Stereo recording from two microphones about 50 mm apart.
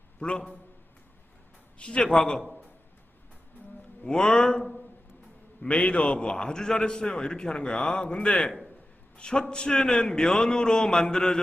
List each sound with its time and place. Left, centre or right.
0.2 s a man's voice: centre
1.8 s a man's voice: left
2.0 s a man's voice: centre
2.4 s a man's voice: centre
4.0 s a man's voice: centre
5.6 s a man's voice: left